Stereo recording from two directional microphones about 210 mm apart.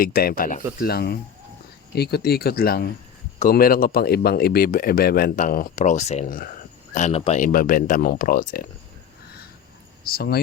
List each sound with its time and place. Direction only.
0.0 s speech: 45° left (ahead or behind)
10.1 s speech: 50° left (ahead or behind)